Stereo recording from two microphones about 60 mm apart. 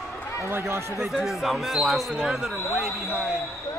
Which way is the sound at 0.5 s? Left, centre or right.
Right.